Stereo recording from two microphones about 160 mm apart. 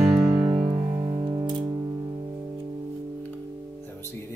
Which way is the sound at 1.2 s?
30° right (ahead or behind).